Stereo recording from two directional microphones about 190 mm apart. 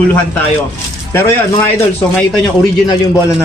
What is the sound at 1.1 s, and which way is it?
Speech, 10° left (ahead or behind).